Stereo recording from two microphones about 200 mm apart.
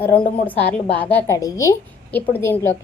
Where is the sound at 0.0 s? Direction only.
10° left (ahead or behind).